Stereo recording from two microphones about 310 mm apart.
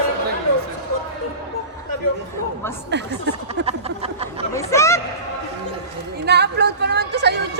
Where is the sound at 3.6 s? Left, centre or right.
Centre.